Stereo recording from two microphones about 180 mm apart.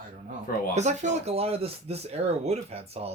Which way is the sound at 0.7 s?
40° right (ahead or behind).